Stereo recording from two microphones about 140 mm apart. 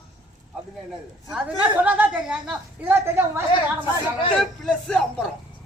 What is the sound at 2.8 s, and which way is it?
A woman's voice, 15° right (ahead or behind).